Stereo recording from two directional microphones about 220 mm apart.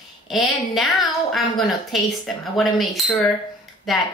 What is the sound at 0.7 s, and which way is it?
A woman's voice, centre (ahead or behind).